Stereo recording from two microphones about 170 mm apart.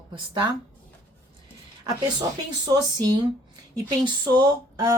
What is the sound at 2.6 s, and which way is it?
Speech, 25° right (ahead or behind).